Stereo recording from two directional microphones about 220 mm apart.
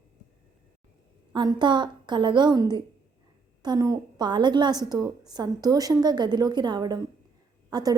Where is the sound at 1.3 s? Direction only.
20° right (ahead or behind).